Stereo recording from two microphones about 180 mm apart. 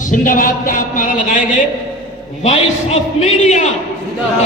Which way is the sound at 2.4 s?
35° left (ahead or behind).